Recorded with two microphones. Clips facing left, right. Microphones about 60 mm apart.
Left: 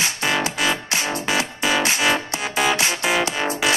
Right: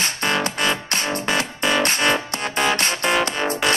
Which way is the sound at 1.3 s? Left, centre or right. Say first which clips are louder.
Even; centre.